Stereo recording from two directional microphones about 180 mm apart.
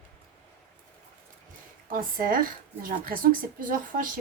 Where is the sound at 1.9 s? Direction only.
50° right (ahead or behind).